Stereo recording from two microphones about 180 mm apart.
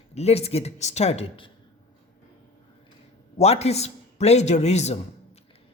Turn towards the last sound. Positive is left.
turn(degrees=40)  # may be behind; listen again after turning